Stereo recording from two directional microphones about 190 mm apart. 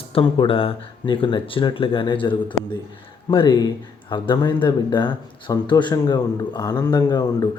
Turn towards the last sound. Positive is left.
turn(degrees=20)  # may be behind; listen again after turning